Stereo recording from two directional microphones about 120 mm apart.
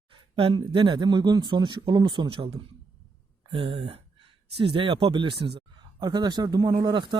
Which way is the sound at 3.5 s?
50° right (ahead or behind).